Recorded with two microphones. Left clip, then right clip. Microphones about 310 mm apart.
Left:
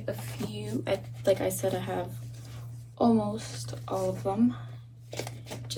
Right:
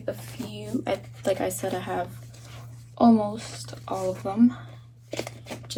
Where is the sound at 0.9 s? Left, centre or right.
Right.